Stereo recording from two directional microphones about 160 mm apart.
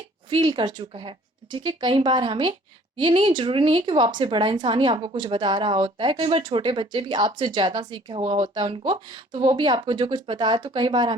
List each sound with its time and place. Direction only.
0.3 s speech: 30° right (ahead or behind)